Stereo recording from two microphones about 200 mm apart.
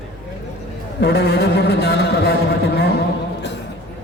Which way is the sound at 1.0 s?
55° left (ahead or behind).